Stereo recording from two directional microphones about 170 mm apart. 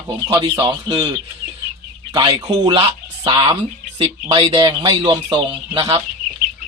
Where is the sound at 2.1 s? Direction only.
25° right (ahead or behind).